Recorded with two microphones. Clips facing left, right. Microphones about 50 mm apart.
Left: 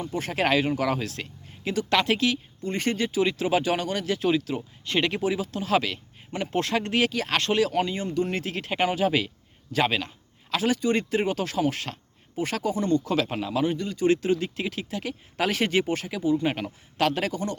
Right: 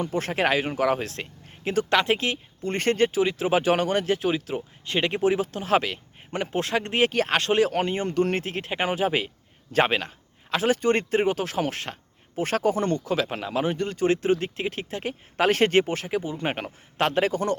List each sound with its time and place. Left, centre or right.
0.1 s speech: right
0.3 s speech: right
3.1 s speech: right
4.2 s speech: centre
7.7 s speech: right
9.7 s speech: right
11.3 s speech: right
13.3 s speech: right
15.8 s speech: right